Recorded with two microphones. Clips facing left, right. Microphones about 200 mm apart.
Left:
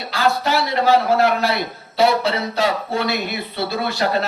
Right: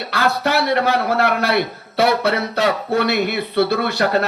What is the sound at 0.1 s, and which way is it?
A man's voice, 60° right (ahead or behind).